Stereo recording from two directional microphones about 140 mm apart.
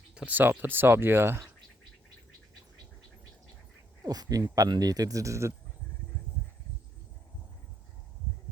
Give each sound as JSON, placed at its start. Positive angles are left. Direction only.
{"t": 0.1, "sound": "speech", "side_deg": -10}
{"t": 4.0, "sound": "speech", "side_deg": -25}